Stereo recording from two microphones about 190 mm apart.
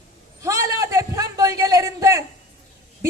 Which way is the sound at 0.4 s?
15° right (ahead or behind).